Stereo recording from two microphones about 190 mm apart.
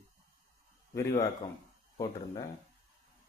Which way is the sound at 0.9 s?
15° left (ahead or behind).